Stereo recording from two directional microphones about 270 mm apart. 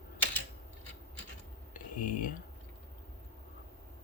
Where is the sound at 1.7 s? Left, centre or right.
Left.